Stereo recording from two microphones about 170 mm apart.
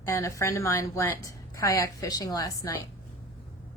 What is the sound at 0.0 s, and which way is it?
A woman's voice, 15° left (ahead or behind).